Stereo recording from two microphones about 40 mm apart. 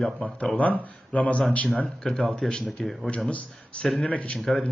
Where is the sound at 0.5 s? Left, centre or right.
Left.